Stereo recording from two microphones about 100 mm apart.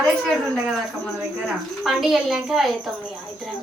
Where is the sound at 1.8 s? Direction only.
Centre (ahead or behind).